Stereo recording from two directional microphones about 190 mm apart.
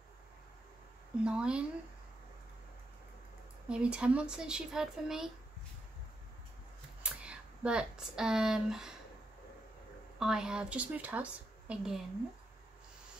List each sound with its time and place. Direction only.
1.2 s speech: 5° right (ahead or behind)
3.6 s speech: 5° right (ahead or behind)
7.0 s speech: 5° right (ahead or behind)
10.1 s a woman's voice: 5° right (ahead or behind)